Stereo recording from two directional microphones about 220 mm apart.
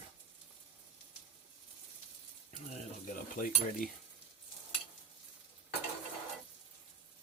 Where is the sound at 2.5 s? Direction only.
35° left (ahead or behind).